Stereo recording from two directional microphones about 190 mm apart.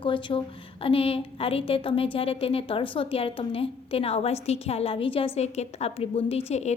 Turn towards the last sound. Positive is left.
turn(degrees=35)  # may be behind; listen again after turning